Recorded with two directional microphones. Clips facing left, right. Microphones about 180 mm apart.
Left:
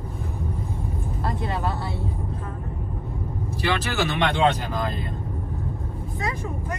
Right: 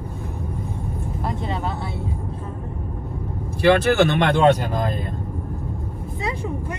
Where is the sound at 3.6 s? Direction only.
55° right (ahead or behind).